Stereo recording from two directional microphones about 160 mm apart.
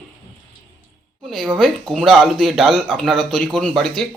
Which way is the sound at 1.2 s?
Centre (ahead or behind).